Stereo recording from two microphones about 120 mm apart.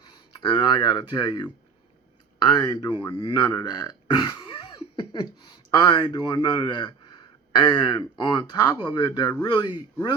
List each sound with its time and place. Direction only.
0.4 s speech: 40° left (ahead or behind)
2.5 s speech: 35° left (ahead or behind)